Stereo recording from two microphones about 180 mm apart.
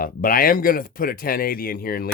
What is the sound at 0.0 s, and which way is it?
Speech, 50° left (ahead or behind).